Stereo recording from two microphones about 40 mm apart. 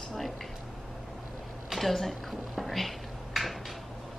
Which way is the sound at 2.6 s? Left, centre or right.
Centre.